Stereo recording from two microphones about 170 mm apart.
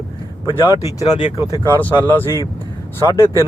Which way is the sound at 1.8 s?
10° left (ahead or behind).